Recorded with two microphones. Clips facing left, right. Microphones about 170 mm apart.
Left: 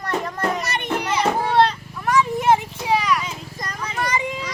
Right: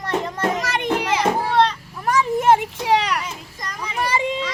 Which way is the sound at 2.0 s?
40° right (ahead or behind).